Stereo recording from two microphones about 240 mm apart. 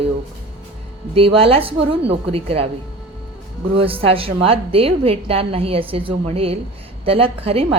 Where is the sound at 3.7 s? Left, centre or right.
Right.